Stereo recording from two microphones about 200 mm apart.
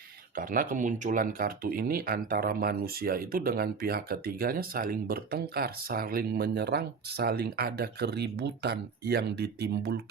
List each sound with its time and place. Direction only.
0.3 s speech: 45° right (ahead or behind)